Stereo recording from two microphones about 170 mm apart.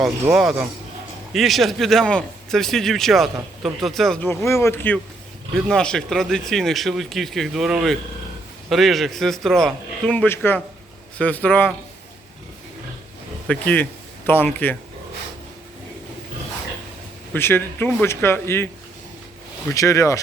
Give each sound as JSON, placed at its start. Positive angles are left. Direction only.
{"t": 0.0, "sound": "a man's voice", "side_deg": -5}
{"t": 4.3, "sound": "a man's voice", "side_deg": 15}
{"t": 13.5, "sound": "speech", "side_deg": 10}
{"t": 17.3, "sound": "speech", "side_deg": 10}
{"t": 19.7, "sound": "speech", "side_deg": 20}